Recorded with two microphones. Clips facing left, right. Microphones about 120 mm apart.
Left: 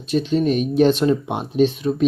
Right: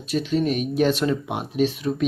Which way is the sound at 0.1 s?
25° left (ahead or behind).